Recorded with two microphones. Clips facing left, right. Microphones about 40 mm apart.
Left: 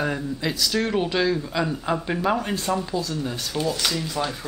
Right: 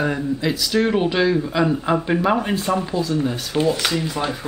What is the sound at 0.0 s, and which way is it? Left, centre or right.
Speech, centre.